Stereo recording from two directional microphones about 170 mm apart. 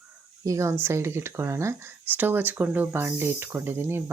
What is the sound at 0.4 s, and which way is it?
Speech, 15° right (ahead or behind).